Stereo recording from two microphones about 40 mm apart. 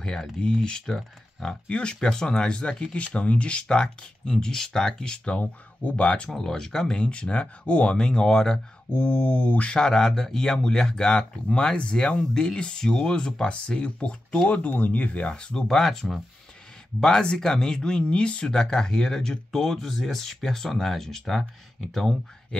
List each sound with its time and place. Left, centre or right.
0.0 s speech: centre
1.7 s speech: left
5.0 s speech: left
6.3 s speech: centre
7.1 s speech: left; by 8.5 s centre
8.9 s speech: left
9.8 s speech: centre
14.5 s speech: left
15.3 s speech: left
15.7 s speech: centre
17.2 s speech: centre
22.5 s a sound: centre